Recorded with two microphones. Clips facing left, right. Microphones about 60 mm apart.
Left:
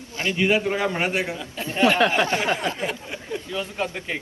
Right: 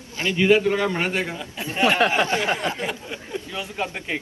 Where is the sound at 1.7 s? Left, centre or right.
Right.